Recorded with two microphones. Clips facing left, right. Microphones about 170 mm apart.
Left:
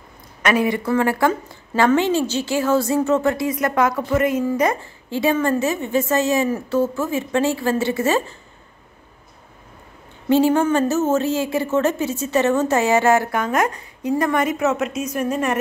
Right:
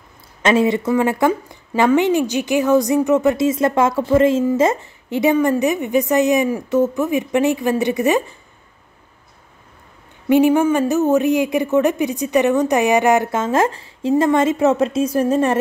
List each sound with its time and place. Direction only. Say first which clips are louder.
0.4 s a woman's voice: right 4 dB; 25° right (ahead or behind)
10.3 s a woman's voice: right 2 dB; 15° right (ahead or behind); by 15.5 s 30° right (ahead or behind)